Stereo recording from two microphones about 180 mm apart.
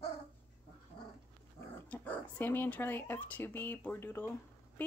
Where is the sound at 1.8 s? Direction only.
10° left (ahead or behind).